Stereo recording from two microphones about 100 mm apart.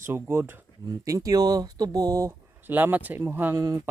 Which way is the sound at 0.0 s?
25° right (ahead or behind).